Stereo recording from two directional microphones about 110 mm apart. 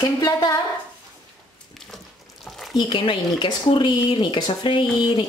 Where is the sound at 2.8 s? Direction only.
50° left (ahead or behind).